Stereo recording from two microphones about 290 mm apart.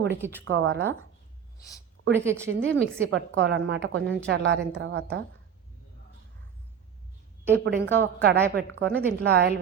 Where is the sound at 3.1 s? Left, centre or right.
Right.